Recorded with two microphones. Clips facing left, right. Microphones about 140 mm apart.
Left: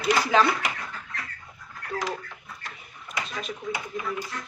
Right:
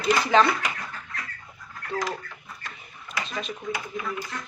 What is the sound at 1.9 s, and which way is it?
Speech, 15° left (ahead or behind).